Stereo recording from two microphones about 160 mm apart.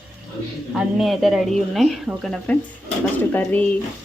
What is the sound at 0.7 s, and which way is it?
Speech, centre (ahead or behind).